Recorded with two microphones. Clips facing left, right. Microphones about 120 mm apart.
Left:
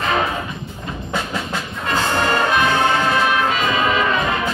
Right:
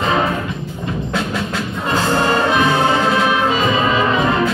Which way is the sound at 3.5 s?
25° right (ahead or behind).